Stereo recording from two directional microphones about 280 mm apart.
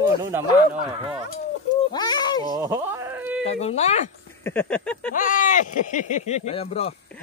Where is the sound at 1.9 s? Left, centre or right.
Centre.